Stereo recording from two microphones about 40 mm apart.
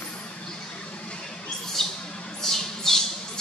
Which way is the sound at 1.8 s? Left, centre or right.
Centre.